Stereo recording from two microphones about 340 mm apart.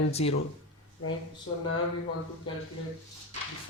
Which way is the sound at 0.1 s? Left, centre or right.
Centre.